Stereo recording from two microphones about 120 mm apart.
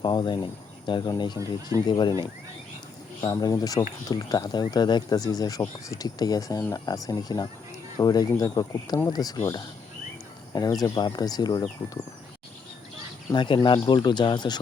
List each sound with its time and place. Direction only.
0.0 s speech: 40° left (ahead or behind)
3.2 s speech: 30° left (ahead or behind)
13.3 s speech: 40° left (ahead or behind)